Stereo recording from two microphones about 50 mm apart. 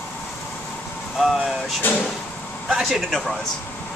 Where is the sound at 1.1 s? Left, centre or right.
Centre.